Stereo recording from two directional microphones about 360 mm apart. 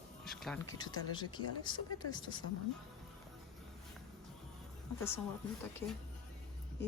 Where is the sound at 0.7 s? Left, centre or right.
Centre.